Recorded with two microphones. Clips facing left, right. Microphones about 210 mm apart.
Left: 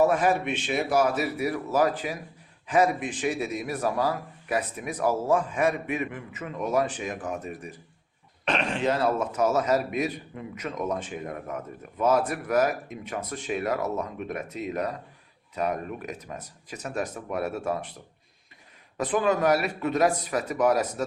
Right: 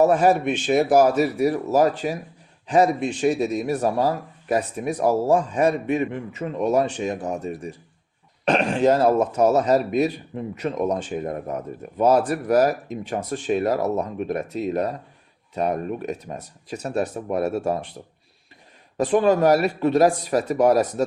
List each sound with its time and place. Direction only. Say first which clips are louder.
0.1 s a man's voice: right 6 dB; 40° right (ahead or behind)
18.9 s a man's voice: right 6 dB; 30° right (ahead or behind)